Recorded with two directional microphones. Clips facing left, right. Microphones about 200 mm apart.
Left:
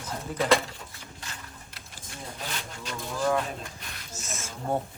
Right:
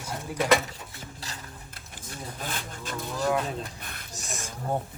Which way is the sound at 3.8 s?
55° right (ahead or behind).